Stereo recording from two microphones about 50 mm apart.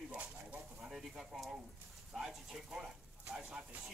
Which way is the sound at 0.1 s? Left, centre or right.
Right.